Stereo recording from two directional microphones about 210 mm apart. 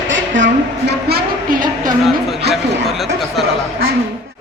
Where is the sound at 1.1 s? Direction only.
45° right (ahead or behind).